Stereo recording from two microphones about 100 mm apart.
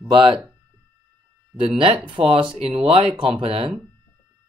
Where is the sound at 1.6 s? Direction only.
60° right (ahead or behind).